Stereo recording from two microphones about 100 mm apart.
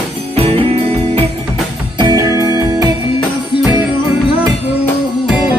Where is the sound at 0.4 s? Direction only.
80° right.